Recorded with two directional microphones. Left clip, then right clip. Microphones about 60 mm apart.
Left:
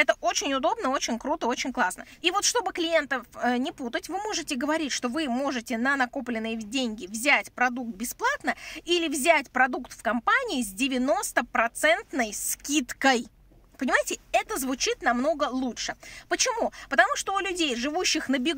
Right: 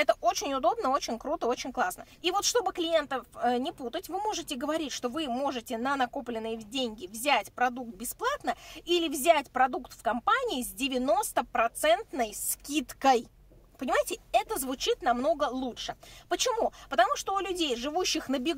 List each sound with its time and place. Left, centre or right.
0.0 s speech: right
12.6 s speech: right
14.0 s speech: right; by 16.0 s centre
16.3 s speech: right